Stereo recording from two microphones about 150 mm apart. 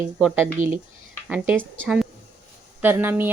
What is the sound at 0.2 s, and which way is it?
A woman's voice, 5° right (ahead or behind).